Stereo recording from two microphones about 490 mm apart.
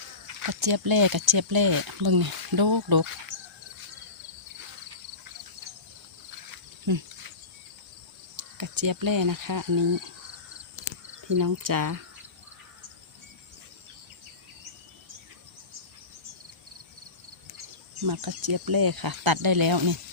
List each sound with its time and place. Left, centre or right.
0.3 s speech: right
6.5 s cricket: right
8.4 s speech: right
11.3 s speech: right
18.0 s speech: right